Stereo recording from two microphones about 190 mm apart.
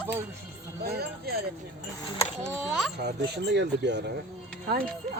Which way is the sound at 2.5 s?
Centre (ahead or behind).